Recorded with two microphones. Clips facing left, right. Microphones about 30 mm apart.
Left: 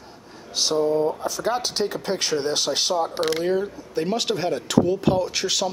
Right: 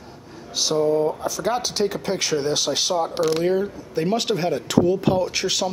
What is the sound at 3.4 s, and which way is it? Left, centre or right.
Speech, centre.